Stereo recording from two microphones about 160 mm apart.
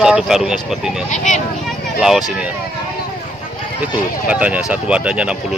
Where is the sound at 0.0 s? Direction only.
5° right (ahead or behind).